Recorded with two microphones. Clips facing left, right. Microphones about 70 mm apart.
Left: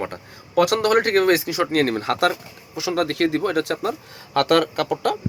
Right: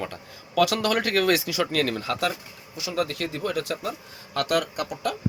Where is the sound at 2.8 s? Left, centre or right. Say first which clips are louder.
Left 6 dB; left.